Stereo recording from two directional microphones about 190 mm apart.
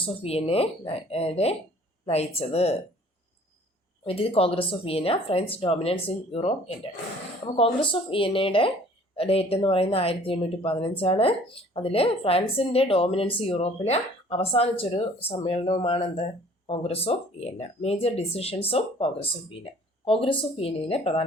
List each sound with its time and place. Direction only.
0.0 s speech: 30° left (ahead or behind)
4.0 s speech: 30° left (ahead or behind)